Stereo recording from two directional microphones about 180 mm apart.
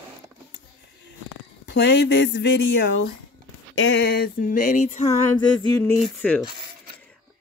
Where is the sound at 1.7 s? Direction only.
75° left (ahead or behind); by 5.0 s 45° left (ahead or behind).